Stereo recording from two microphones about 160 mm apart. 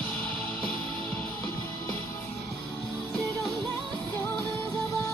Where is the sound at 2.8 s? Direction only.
5° left (ahead or behind).